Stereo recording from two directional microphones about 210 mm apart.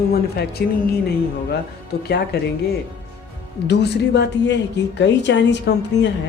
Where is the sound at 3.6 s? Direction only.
55° left (ahead or behind).